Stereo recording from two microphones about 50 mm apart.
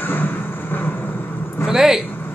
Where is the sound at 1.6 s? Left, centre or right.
Centre.